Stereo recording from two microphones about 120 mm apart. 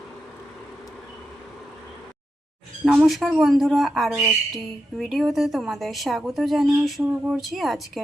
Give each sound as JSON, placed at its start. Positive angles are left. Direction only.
{"t": 2.8, "sound": "speech", "side_deg": -5}